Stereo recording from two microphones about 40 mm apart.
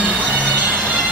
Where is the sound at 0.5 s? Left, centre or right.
Right.